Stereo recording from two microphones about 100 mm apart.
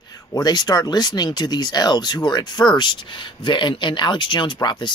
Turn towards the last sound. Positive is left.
turn(degrees=50)  # may be behind; listen again after turning